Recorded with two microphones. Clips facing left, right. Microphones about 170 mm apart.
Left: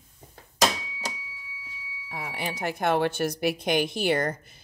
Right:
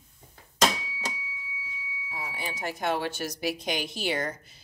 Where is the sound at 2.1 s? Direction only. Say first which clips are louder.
Left 4 dB; 60° left (ahead or behind).